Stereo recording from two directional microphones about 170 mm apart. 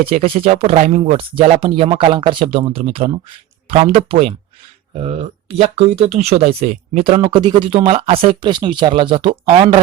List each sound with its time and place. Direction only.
0.1 s speech: 35° right (ahead or behind)
0.4 s speech: 50° right (ahead or behind); by 9.8 s 30° right (ahead or behind)